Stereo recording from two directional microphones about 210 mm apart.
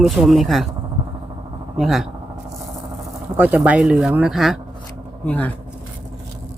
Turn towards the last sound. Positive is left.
turn(degrees=5)  # may be behind; listen again after turning